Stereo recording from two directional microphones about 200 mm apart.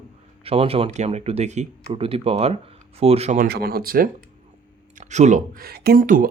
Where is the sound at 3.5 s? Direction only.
50° right (ahead or behind).